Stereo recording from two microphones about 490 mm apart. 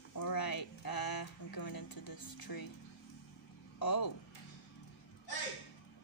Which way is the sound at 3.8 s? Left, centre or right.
Left.